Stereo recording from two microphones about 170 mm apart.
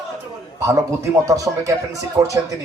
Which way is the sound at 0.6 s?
20° right (ahead or behind).